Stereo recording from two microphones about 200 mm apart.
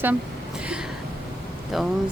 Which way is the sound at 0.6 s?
5° right (ahead or behind).